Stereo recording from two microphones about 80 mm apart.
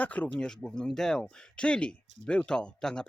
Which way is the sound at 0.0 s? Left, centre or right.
Centre.